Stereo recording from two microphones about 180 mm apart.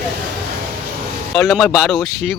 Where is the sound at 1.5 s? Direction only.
Centre (ahead or behind).